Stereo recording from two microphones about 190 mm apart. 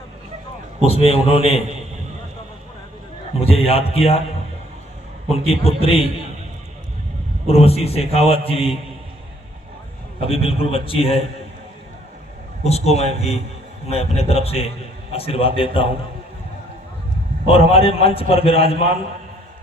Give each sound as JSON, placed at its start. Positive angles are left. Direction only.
{"t": 0.8, "sound": "a man's voice", "side_deg": 30}
{"t": 3.4, "sound": "a man's voice", "side_deg": 30}
{"t": 5.3, "sound": "a man's voice", "side_deg": 30}
{"t": 7.4, "sound": "a man's voice", "side_deg": 30}
{"t": 10.2, "sound": "a man's voice", "side_deg": 30}
{"t": 12.6, "sound": "a man's voice", "side_deg": 35}
{"t": 17.4, "sound": "a man's voice", "side_deg": 30}